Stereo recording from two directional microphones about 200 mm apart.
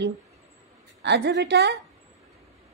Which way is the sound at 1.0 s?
60° right (ahead or behind).